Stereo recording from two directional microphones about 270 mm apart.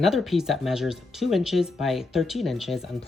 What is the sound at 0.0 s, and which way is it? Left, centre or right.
Speech, centre.